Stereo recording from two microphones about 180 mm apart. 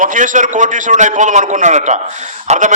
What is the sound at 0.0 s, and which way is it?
A man's voice, 45° right (ahead or behind).